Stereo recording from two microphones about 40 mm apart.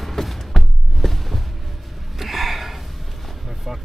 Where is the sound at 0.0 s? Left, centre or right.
Centre.